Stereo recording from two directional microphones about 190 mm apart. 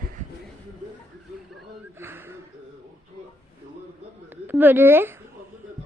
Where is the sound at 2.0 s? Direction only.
10° right (ahead or behind).